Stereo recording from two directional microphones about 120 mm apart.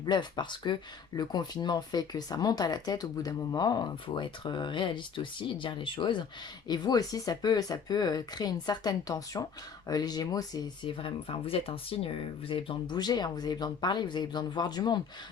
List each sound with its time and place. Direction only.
0.0 s speech: 40° left (ahead or behind)
10.8 s speech: 50° left (ahead or behind)